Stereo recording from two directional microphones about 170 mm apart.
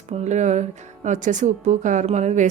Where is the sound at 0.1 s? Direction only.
45° right (ahead or behind).